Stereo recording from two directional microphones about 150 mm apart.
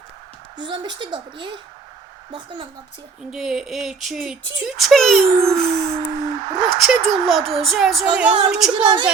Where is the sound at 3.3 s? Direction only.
5° right (ahead or behind).